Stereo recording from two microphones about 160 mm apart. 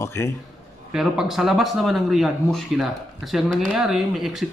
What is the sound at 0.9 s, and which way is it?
Speech, centre (ahead or behind).